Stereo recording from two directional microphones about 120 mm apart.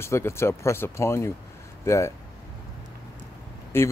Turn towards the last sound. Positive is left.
turn(degrees=20)  # may be behind; listen again after turning